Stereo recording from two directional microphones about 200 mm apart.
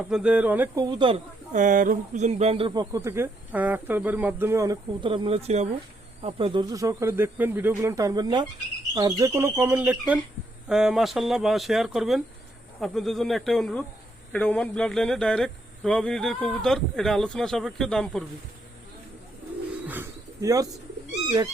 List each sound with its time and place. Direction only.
0.1 s speech: 5° right (ahead or behind)
0.9 s speech: 25° right (ahead or behind)
1.5 s speech: 40° right (ahead or behind); by 18.3 s centre (ahead or behind)
19.9 s pigeon: 15° right (ahead or behind)